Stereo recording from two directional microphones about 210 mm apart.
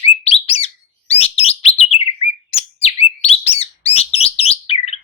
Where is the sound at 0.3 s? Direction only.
30° left (ahead or behind).